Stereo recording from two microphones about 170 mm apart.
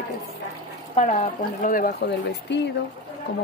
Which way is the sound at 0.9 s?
45° left (ahead or behind).